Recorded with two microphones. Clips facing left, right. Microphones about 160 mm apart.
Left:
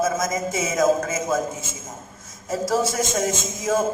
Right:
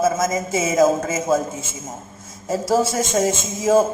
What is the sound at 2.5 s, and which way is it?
Speech, 30° right (ahead or behind).